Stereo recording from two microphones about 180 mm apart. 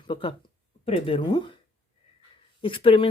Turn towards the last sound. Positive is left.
turn(degrees=30)  # may be behind; listen again after turning